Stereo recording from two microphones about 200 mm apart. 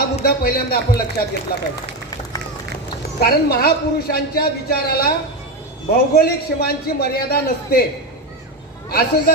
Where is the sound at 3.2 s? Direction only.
50° left (ahead or behind).